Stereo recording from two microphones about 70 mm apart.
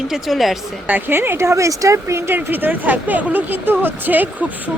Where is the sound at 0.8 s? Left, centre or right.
Right.